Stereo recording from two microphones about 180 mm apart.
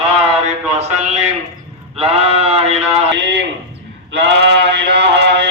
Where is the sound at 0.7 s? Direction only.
40° right (ahead or behind).